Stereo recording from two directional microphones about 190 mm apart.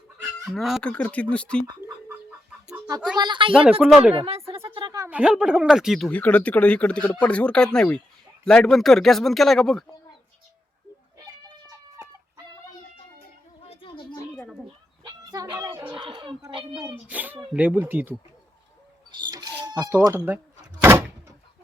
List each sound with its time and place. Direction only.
0.5 s speech: centre (ahead or behind)
1.6 s chicken: 10° right (ahead or behind)
3.2 s speech: 25° right (ahead or behind)
3.5 s speech: 5° right (ahead or behind)
4.1 s a sound: 30° right (ahead or behind)
5.0 s speech: 5° right (ahead or behind)
13.7 s a sound: 25° left (ahead or behind)
14.3 s a sound: 5° left (ahead or behind)
15.0 s a sound: 20° right (ahead or behind)
16.0 s a child's voice: 25° right (ahead or behind)
16.8 s speech: 10° right (ahead or behind)
19.1 s rodents: 20° right (ahead or behind)
19.7 s speech: 10° right (ahead or behind)
20.8 s door: 10° right (ahead or behind)